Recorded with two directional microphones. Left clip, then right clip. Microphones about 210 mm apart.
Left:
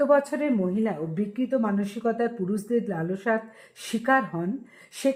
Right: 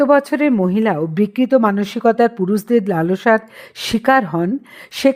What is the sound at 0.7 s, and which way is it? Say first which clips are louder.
Speech: right 11 dB; 45° right (ahead or behind).